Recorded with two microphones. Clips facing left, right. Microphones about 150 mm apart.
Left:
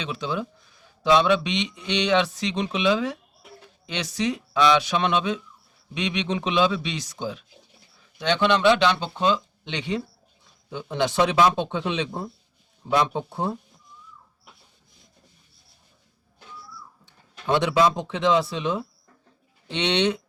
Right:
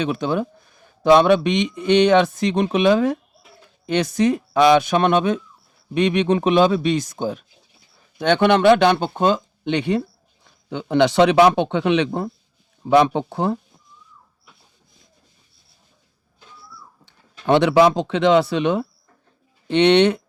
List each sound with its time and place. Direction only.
0.0 s a man's voice: 55° right (ahead or behind)
10.4 s speech: 70° right (ahead or behind)
17.1 s speech: 65° right (ahead or behind)